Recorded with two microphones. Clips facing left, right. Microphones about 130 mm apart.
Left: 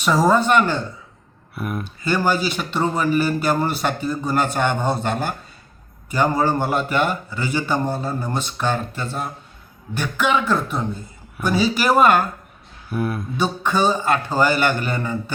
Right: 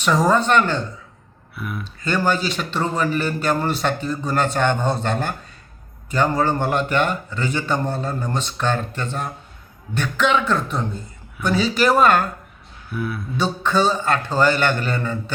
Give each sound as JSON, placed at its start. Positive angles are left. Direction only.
{"t": 0.0, "sound": "a man's voice", "side_deg": 5}
{"t": 1.5, "sound": "speech", "side_deg": 45}
{"t": 2.0, "sound": "a man's voice", "side_deg": 10}
{"t": 12.9, "sound": "speech", "side_deg": 40}
{"t": 13.3, "sound": "a man's voice", "side_deg": 10}